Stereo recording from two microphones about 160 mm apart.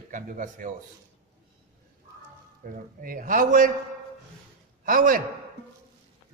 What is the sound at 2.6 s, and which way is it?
Speech, 60° right (ahead or behind).